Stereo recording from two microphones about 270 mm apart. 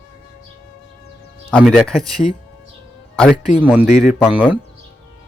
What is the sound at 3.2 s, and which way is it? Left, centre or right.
Speech, centre.